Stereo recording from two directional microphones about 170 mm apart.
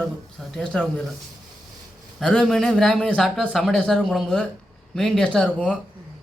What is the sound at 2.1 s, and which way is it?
A man's voice, 5° left (ahead or behind).